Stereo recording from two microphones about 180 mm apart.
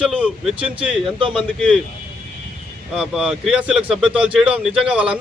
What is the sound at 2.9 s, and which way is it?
Speech, 5° right (ahead or behind).